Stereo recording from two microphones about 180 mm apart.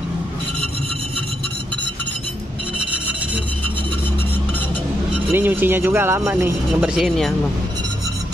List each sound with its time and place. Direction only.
5.3 s speech: 10° right (ahead or behind)